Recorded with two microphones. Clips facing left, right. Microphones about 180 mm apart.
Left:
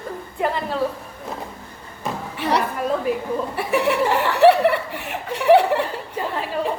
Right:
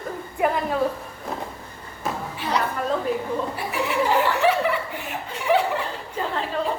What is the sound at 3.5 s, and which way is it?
Chuckle, 65° left (ahead or behind).